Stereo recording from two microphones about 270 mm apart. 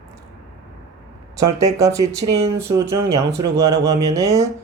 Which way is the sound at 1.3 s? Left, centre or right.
Centre.